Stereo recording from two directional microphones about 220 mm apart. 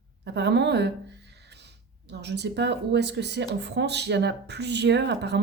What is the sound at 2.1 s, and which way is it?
Speech, 50° right (ahead or behind).